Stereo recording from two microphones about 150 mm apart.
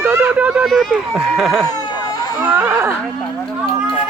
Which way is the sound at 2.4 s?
15° right (ahead or behind).